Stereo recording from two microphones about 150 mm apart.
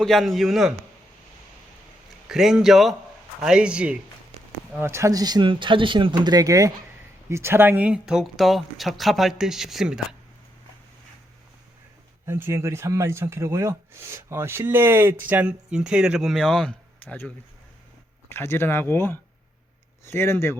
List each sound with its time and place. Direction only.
0.0 s speech: centre (ahead or behind)
2.3 s speech: 5° right (ahead or behind)
12.2 s speech: 15° right (ahead or behind); by 20.6 s 15° left (ahead or behind)